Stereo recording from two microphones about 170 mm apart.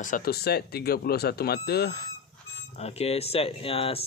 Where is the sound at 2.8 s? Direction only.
35° left (ahead or behind).